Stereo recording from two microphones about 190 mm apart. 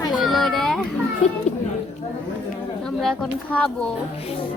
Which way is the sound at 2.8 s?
5° left (ahead or behind).